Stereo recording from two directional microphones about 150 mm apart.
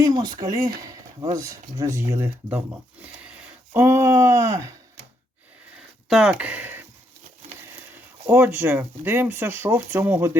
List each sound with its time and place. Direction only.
0.0 s speech: 25° right (ahead or behind)
6.1 s speech: 5° right (ahead or behind)
8.3 s speech: 15° right (ahead or behind)